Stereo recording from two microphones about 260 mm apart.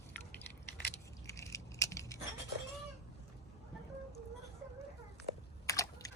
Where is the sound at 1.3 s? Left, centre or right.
Centre.